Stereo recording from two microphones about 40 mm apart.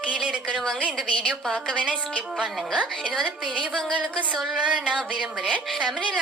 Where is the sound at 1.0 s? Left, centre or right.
Left.